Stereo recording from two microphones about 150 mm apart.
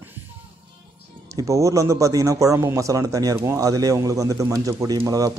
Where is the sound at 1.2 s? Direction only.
20° right (ahead or behind).